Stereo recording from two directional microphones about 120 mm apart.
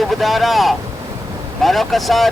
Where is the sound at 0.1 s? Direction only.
Centre (ahead or behind).